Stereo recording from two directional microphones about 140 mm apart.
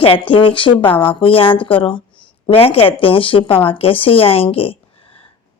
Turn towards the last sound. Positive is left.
turn(degrees=40)  # may be behind; listen again after turning